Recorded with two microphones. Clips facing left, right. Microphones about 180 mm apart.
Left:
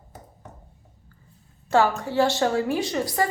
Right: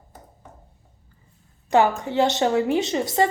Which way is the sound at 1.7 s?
20° right (ahead or behind).